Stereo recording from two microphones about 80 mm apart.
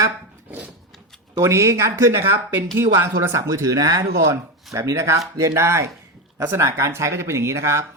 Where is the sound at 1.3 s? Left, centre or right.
Right.